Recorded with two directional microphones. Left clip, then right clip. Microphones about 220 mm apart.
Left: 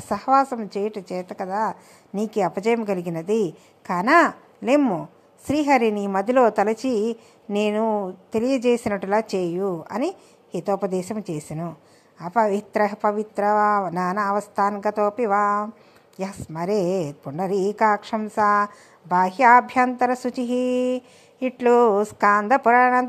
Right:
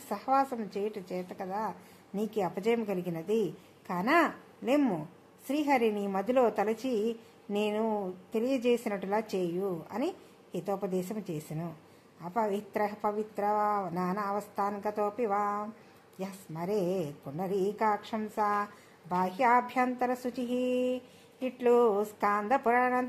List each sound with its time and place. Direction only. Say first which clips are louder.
0.1 s a woman's voice: left 10 dB; 25° left (ahead or behind)